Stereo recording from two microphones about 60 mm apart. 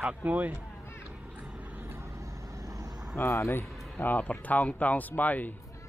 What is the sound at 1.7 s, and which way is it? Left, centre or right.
Vehicle, right.